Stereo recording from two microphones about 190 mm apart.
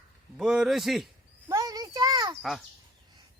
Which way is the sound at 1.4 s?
20° right (ahead or behind).